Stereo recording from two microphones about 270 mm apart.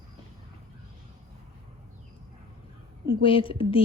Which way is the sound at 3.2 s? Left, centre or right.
Centre.